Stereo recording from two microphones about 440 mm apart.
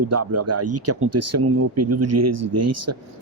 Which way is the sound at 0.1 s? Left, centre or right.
Right.